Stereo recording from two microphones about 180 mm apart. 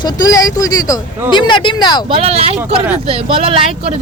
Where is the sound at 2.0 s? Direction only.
30° right (ahead or behind).